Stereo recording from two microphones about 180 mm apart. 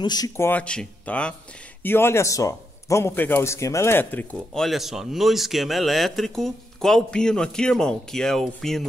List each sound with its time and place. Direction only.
0.0 s speech: 20° left (ahead or behind)
0.5 s speech: 5° left (ahead or behind)